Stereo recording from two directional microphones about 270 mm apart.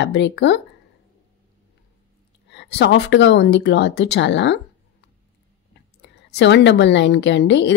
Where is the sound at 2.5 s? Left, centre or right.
Left.